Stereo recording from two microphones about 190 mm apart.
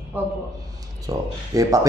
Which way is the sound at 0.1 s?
10° right (ahead or behind).